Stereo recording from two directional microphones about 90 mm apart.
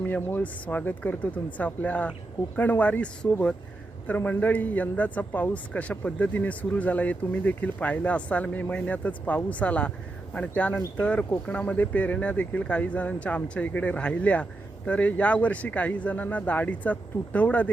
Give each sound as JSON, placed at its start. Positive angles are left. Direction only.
{"t": 0.0, "sound": "a man's voice", "side_deg": 20}